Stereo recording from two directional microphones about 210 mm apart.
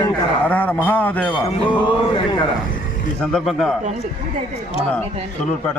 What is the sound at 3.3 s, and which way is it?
Speech, centre (ahead or behind).